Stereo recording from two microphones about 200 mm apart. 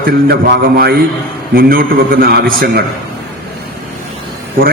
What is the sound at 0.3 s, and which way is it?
A man's voice, 55° right (ahead or behind).